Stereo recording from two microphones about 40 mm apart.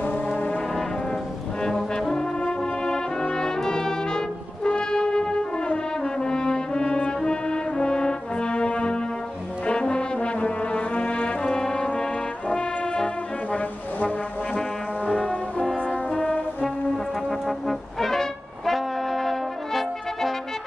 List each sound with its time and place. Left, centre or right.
1.6 s brass instrument: centre
15.1 s brass instrument: centre
16.9 s brass instrument: centre